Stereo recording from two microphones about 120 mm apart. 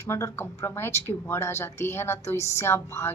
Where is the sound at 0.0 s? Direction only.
20° left (ahead or behind).